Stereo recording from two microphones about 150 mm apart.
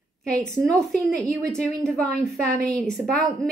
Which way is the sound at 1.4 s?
5° left (ahead or behind).